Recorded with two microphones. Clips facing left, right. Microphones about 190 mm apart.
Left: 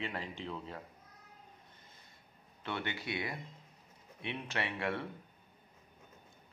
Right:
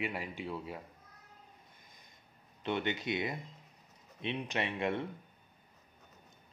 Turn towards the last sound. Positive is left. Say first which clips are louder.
# right 3 dB
turn(degrees=-20)  # may be behind; listen again after turning